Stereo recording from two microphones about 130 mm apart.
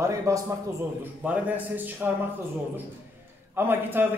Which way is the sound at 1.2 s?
10° right (ahead or behind).